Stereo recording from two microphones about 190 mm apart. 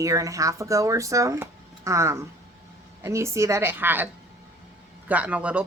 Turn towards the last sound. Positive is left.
turn(degrees=-5)  # may be behind; listen again after turning